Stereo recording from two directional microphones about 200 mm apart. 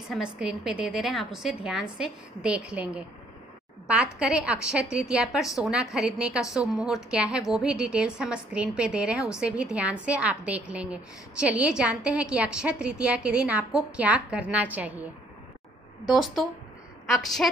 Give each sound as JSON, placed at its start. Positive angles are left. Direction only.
{"t": 0.1, "sound": "a woman's voice", "side_deg": -5}
{"t": 16.1, "sound": "a woman's voice", "side_deg": 0}